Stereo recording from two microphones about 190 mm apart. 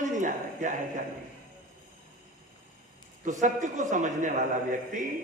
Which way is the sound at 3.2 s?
40° right (ahead or behind).